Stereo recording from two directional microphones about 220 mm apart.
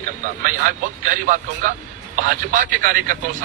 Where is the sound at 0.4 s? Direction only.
40° right (ahead or behind).